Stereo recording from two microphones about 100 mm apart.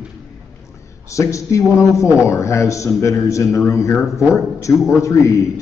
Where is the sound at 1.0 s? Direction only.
30° left (ahead or behind).